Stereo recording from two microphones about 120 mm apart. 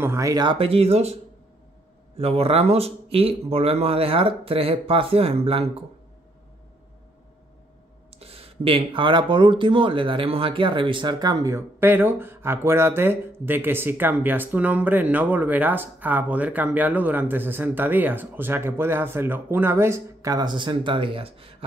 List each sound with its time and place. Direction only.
0.0 s speech: 25° right (ahead or behind)
0.6 s speech: 55° right (ahead or behind)
2.1 s speech: 55° right (ahead or behind)
8.2 s speech: 55° right (ahead or behind)